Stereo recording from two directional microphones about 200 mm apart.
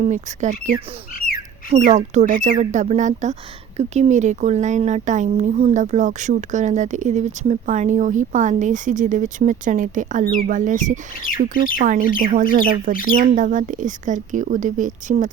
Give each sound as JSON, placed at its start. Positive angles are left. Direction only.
{"t": 0.0, "sound": "speech", "side_deg": -35}
{"t": 1.7, "sound": "speech", "side_deg": -35}
{"t": 11.3, "sound": "speech", "side_deg": 45}
{"t": 11.8, "sound": "speech", "side_deg": -40}